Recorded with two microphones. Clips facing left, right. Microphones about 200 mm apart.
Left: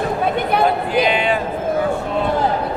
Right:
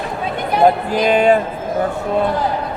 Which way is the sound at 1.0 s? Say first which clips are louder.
Right 5 dB; 40° right (ahead or behind).